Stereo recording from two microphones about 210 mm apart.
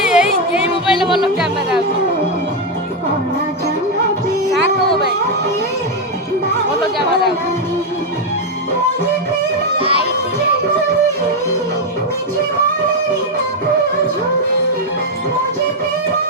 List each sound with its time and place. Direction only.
0.0 s music: 5° right (ahead or behind)
9.7 s music: 25° right (ahead or behind)